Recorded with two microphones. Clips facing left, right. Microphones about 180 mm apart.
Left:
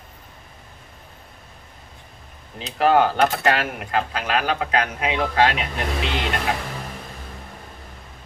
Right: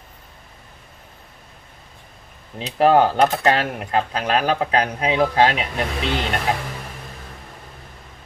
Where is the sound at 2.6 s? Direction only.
35° right (ahead or behind).